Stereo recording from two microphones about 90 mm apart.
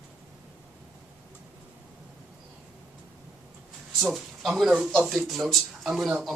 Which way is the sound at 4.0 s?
5° right (ahead or behind).